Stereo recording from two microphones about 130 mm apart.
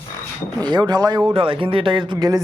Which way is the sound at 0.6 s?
35° right (ahead or behind).